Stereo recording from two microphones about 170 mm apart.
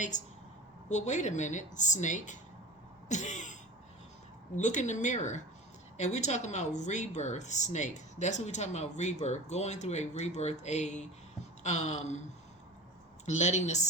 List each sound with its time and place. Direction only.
0.1 s speech: 45° left (ahead or behind)
3.1 s throat clearing: 45° left (ahead or behind)
4.5 s speech: 45° left (ahead or behind)
13.2 s speech: 45° left (ahead or behind)